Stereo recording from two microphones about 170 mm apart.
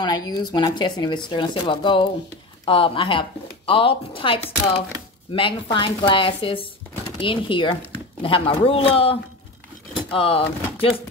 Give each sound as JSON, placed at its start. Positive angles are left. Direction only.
{"t": 0.0, "sound": "speech", "side_deg": 25}